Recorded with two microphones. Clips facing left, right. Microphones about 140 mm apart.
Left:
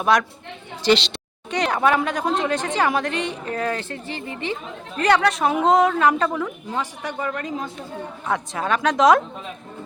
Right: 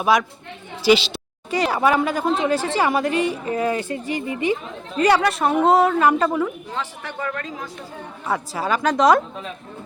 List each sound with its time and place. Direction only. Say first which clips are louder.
0.0 s a woman's voice: right 1 dB; 5° right (ahead or behind)
6.7 s speech: left 2 dB; 15° left (ahead or behind)
8.3 s a woman's voice: right 1 dB; 5° right (ahead or behind)